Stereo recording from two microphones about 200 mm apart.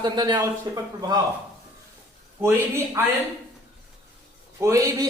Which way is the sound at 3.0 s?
15° right (ahead or behind).